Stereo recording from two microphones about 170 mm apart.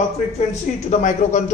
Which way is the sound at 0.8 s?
45° left (ahead or behind).